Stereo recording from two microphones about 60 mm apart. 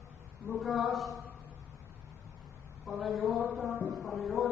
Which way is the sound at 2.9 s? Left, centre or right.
Centre.